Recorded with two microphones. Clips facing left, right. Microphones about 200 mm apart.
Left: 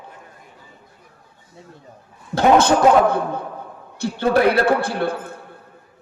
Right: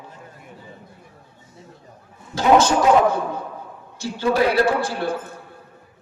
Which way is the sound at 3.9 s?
60° left (ahead or behind).